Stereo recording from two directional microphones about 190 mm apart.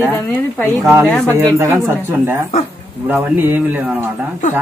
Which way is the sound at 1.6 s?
15° right (ahead or behind).